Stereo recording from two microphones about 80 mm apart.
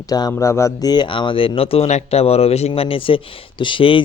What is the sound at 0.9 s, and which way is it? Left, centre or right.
Speech, left.